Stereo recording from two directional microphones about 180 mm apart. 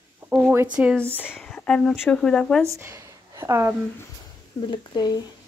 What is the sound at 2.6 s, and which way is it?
Speech, 15° right (ahead or behind).